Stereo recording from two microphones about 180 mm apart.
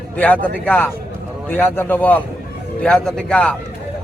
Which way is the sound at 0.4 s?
10° left (ahead or behind).